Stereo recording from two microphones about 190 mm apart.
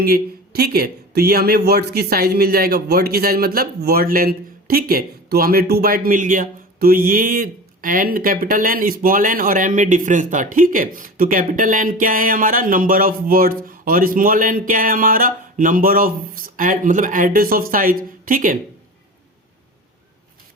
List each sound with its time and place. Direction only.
0.0 s speech: 55° right (ahead or behind)